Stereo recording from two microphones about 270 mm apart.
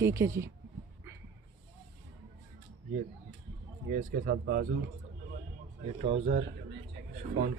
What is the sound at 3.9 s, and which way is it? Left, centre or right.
Speech, right.